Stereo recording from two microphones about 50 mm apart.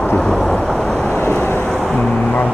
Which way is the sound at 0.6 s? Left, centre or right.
Centre.